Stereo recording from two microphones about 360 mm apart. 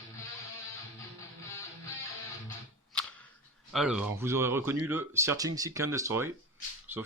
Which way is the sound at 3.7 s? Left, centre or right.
Centre.